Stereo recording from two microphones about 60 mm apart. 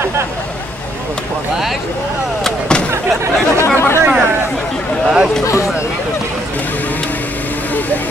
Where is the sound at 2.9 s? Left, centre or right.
Right.